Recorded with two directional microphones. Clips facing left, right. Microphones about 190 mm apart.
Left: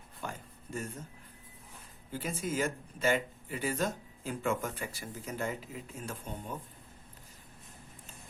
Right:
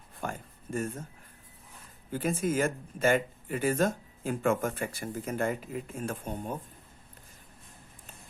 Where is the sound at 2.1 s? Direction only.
50° right (ahead or behind).